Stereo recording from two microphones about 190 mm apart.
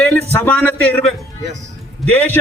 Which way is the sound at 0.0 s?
5° left (ahead or behind).